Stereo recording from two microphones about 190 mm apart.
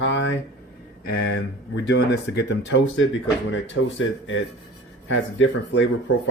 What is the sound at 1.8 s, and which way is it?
Speech, 65° left (ahead or behind).